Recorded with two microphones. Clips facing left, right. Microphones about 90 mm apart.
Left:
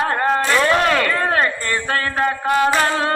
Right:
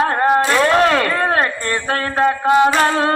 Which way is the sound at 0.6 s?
35° right (ahead or behind).